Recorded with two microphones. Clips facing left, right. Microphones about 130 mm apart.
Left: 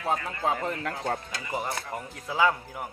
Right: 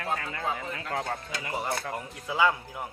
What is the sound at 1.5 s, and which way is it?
Speech, 5° left (ahead or behind).